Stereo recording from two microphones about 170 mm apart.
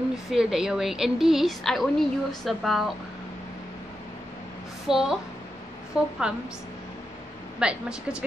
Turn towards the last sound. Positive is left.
turn(degrees=-5)  # may be behind; listen again after turning